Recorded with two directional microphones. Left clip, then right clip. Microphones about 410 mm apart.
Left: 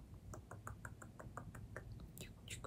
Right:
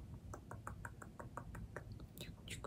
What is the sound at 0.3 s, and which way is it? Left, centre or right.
Knock, centre.